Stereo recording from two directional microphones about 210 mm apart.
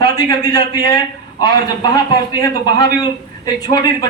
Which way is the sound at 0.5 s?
20° left (ahead or behind).